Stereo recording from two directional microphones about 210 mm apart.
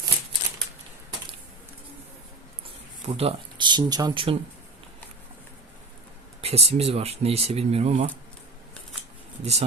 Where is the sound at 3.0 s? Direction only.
30° right (ahead or behind).